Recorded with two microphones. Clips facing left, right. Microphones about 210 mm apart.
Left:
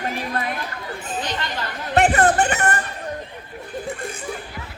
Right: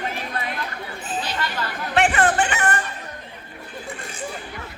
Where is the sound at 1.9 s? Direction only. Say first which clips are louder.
Left 3 dB; 35° left (ahead or behind).